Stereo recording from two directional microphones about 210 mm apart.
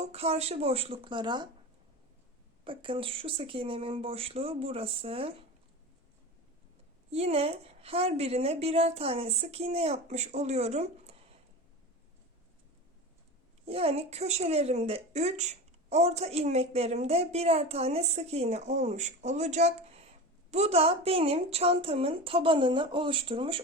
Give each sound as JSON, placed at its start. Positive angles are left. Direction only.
{"t": 0.0, "sound": "a woman's voice", "side_deg": -30}
{"t": 2.6, "sound": "a woman's voice", "side_deg": -25}
{"t": 7.1, "sound": "a woman's voice", "side_deg": -30}
{"t": 13.7, "sound": "a woman's voice", "side_deg": -30}